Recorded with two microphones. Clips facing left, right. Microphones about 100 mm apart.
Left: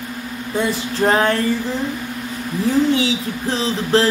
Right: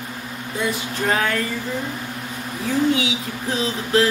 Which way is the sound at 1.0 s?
35° left (ahead or behind).